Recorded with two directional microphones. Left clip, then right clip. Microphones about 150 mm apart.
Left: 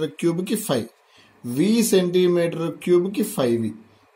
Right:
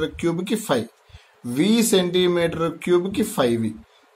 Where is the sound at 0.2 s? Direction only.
40° left (ahead or behind).